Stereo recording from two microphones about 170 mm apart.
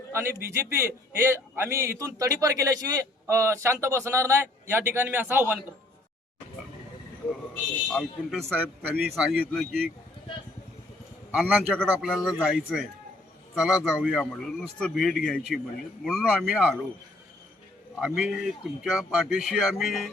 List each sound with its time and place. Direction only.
0.1 s a man's voice: 15° right (ahead or behind)
7.9 s speech: centre (ahead or behind)
11.3 s a man's voice: 10° right (ahead or behind)
18.0 s speech: centre (ahead or behind)